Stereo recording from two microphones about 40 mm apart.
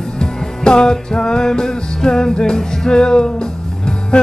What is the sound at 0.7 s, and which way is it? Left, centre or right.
Music, left.